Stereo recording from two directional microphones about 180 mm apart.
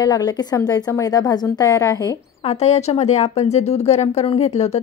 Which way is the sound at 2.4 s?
35° left (ahead or behind).